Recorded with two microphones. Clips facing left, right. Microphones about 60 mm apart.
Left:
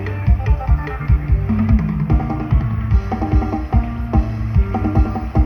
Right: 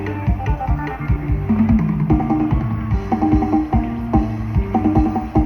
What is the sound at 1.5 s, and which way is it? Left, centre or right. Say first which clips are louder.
Music: right 3 dB; left.